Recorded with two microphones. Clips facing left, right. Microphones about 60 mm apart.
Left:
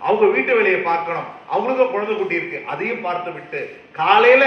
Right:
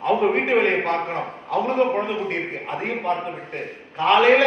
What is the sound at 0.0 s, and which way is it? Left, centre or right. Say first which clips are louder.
A man's voice: left 4 dB; left.